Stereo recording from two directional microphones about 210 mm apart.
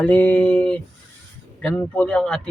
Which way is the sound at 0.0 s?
10° left (ahead or behind).